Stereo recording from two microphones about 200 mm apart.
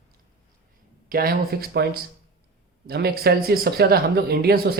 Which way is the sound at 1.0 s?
50° right (ahead or behind).